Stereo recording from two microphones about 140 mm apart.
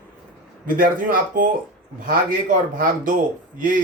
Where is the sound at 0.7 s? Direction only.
80° right.